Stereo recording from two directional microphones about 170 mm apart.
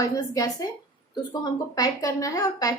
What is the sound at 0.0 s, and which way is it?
A woman's voice, 20° left (ahead or behind).